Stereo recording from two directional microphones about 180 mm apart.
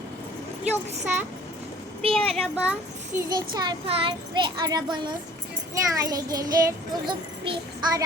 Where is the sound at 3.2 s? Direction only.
20° right (ahead or behind).